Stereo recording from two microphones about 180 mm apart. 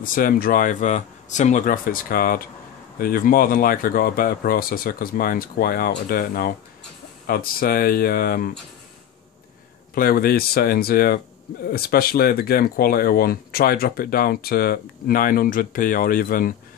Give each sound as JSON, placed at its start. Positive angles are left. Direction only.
{"t": 0.0, "sound": "speech", "side_deg": 50}
{"t": 9.9, "sound": "speech", "side_deg": 55}